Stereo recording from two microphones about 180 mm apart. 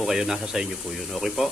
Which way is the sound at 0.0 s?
Centre (ahead or behind).